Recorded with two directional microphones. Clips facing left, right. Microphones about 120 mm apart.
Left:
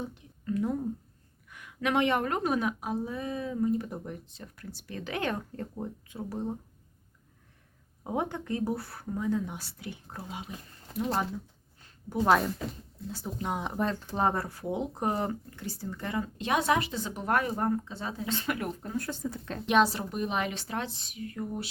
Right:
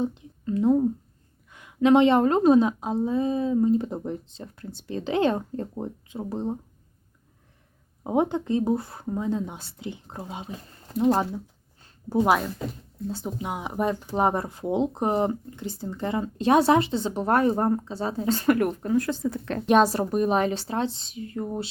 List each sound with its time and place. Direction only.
0.0 s speech: 25° right (ahead or behind)
8.0 s speech: 20° right (ahead or behind)
13.1 s speech: 25° right (ahead or behind)
13.4 s speech: 5° right (ahead or behind); by 18.7 s 50° right (ahead or behind)
18.8 s speech: 85° right; by 19.6 s 70° right (ahead or behind)
19.6 s a woman's voice: 40° right (ahead or behind)